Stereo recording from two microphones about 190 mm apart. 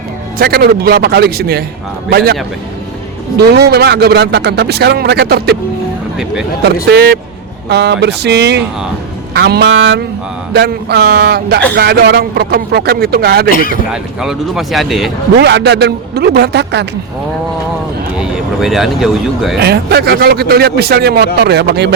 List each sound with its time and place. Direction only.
0.3 s speech: 55° right (ahead or behind)
6.8 s speech: 55° right (ahead or behind); by 10.0 s 70° right (ahead or behind)
10.5 s speech: 60° right (ahead or behind)
13.9 s speech: 5° right (ahead or behind)
15.4 s speech: 65° right (ahead or behind)
18.2 s speech: centre (ahead or behind)
19.5 s speech: 60° right (ahead or behind)